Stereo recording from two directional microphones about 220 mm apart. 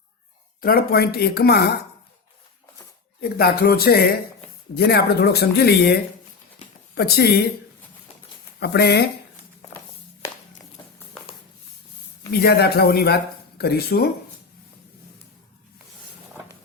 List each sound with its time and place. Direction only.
0.6 s speech: 40° left (ahead or behind)
3.2 s speech: 45° left (ahead or behind)
8.6 s speech: 45° left (ahead or behind)
12.3 s speech: 45° left (ahead or behind)